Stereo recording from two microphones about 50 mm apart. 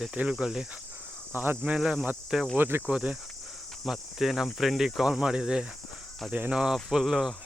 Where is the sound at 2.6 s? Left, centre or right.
Right.